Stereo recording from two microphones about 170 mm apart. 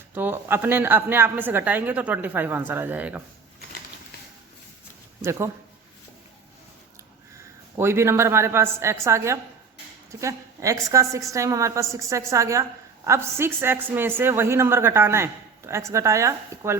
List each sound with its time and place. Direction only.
0.1 s a man's voice: 10° right (ahead or behind)
5.2 s a man's voice: 15° right (ahead or behind)
7.3 s a woman's voice: 15° right (ahead or behind)